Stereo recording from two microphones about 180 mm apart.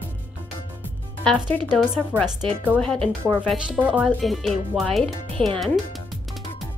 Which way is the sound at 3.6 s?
5° right (ahead or behind).